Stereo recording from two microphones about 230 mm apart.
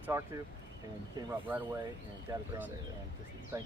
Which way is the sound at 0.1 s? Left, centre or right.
Centre.